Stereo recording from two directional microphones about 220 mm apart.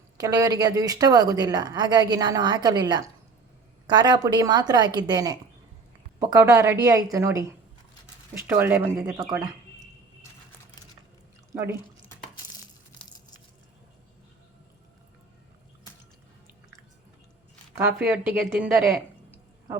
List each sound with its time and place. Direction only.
0.2 s a woman's voice: 15° right (ahead or behind)
8.4 s speech: 10° right (ahead or behind)
11.5 s a woman's voice: 10° right (ahead or behind)
18.3 s a sound: 5° right (ahead or behind)